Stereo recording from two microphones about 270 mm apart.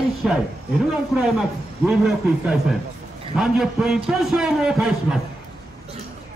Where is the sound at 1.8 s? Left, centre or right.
Centre.